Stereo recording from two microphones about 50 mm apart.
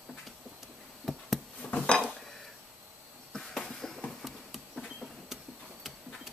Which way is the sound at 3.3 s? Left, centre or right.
Centre.